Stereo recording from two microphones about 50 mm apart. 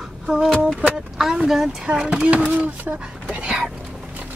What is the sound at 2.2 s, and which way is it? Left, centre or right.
Speech, right.